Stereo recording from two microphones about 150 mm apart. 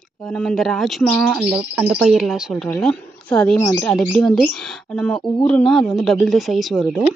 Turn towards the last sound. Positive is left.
turn(degrees=0)  # may be behind; listen again after turning